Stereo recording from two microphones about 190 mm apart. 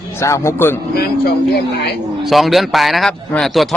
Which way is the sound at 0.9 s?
55° left (ahead or behind).